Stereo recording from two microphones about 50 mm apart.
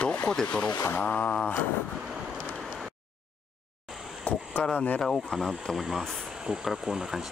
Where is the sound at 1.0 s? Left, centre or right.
Left.